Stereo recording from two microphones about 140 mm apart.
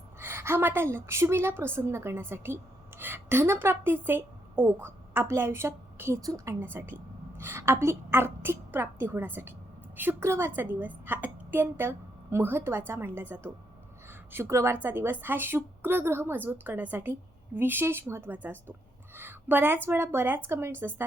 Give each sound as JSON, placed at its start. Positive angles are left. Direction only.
{"t": 0.2, "sound": "a woman's voice", "side_deg": -15}